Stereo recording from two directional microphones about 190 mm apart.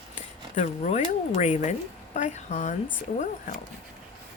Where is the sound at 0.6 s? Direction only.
40° left (ahead or behind).